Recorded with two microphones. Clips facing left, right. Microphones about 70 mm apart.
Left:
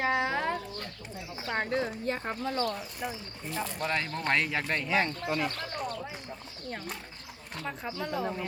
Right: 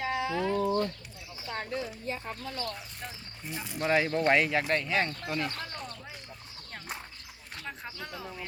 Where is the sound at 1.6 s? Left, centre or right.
Left.